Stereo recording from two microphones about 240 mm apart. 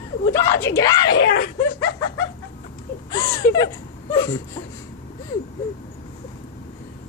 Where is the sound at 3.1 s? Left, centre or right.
Centre.